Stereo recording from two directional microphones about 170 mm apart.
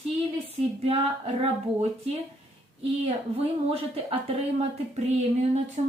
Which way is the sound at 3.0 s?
35° right (ahead or behind).